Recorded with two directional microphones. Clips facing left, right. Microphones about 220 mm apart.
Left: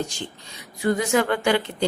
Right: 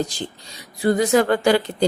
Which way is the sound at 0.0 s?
35° right (ahead or behind).